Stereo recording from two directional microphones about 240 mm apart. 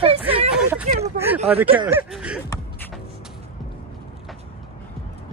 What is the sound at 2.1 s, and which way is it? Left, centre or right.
Speech, centre.